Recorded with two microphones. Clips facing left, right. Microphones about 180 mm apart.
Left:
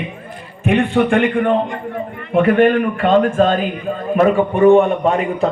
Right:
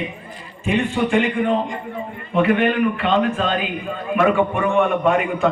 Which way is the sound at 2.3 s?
45° left (ahead or behind).